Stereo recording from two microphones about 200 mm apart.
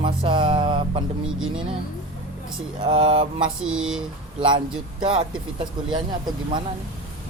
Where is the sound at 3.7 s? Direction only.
5° right (ahead or behind).